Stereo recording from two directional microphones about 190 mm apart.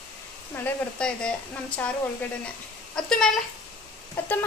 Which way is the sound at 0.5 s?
10° left (ahead or behind).